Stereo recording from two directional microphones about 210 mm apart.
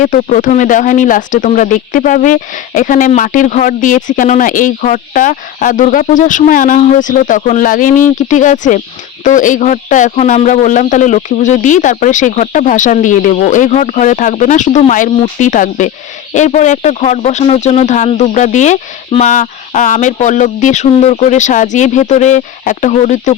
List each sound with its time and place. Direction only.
0.0 s speech: 40° left (ahead or behind)